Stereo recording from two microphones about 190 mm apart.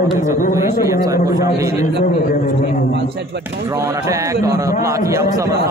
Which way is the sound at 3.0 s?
60° right (ahead or behind).